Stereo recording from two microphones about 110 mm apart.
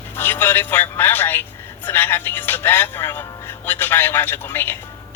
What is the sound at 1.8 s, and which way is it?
Speech, 20° left (ahead or behind).